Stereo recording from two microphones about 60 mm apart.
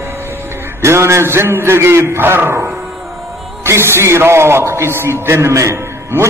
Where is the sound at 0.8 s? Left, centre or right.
Right.